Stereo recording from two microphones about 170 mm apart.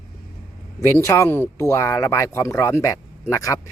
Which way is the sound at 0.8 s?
15° left (ahead or behind).